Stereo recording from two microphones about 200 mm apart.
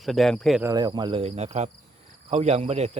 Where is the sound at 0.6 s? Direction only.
20° right (ahead or behind).